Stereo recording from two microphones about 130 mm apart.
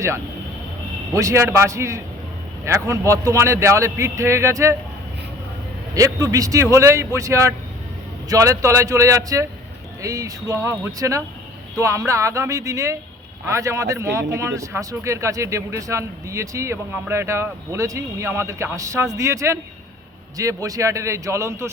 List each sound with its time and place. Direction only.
1.1 s speech: 25° right (ahead or behind)
5.9 s speech: 25° right (ahead or behind)